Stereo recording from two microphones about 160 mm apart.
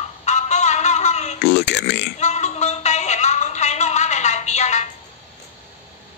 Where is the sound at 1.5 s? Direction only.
90° left.